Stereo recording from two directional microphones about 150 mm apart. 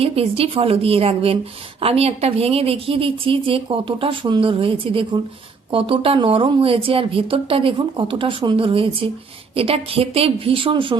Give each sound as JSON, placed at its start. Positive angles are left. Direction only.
{"t": 0.0, "sound": "a woman's voice", "side_deg": -40}